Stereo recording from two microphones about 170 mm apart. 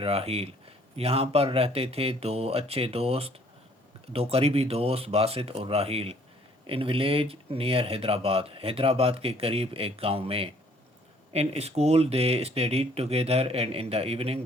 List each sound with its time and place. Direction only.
0.0 s speech: 35° right (ahead or behind)